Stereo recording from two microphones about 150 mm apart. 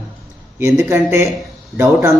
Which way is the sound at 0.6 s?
20° right (ahead or behind).